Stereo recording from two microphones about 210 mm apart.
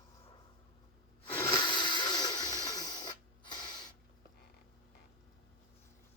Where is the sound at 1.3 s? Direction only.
20° left (ahead or behind).